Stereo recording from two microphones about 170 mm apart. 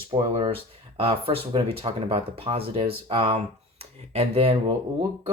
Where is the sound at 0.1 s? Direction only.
35° right (ahead or behind).